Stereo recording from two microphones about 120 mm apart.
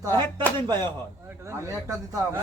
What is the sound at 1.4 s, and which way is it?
Speech, 25° right (ahead or behind).